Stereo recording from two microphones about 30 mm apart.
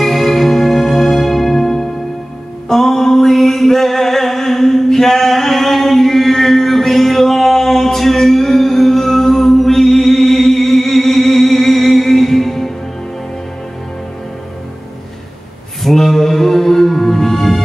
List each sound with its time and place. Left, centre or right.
0.0 s music: centre
15.8 s music: centre